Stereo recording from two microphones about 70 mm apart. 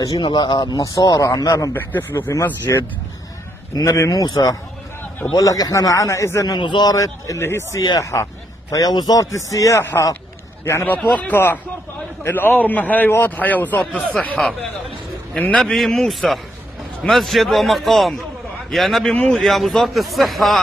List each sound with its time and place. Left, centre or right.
0.0 s a man's voice: left
1.7 s speech: left
2.7 s a man's voice: left
6.4 s a man's voice: left
6.9 s a man's voice: left; by 14.4 s centre
15.5 s speech: centre